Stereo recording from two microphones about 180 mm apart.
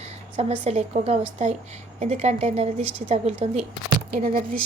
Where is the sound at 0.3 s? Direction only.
40° right (ahead or behind).